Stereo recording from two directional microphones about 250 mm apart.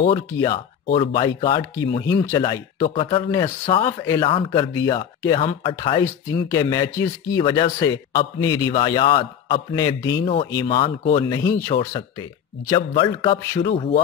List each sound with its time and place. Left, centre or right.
0.3 s speech: centre